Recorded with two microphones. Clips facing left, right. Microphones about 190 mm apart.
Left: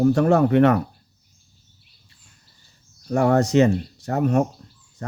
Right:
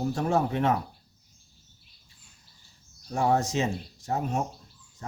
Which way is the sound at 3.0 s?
70° left (ahead or behind).